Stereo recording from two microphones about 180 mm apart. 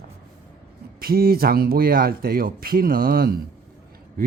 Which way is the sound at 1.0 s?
55° right (ahead or behind).